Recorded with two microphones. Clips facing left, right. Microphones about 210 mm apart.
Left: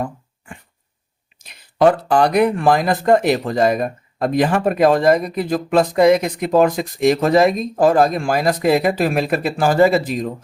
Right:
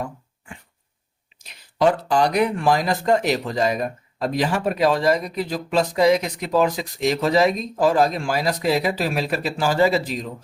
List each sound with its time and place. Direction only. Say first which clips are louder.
1.8 s speech: left 4 dB; 55° left (ahead or behind)